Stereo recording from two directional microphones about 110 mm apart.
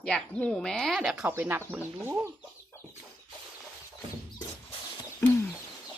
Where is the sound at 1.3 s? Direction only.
20° right (ahead or behind).